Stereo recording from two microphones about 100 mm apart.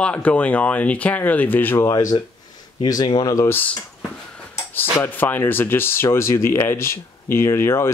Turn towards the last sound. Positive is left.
turn(degrees=25)  # may be behind; listen again after turning